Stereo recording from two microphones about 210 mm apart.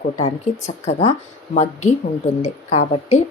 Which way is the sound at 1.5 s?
35° left (ahead or behind).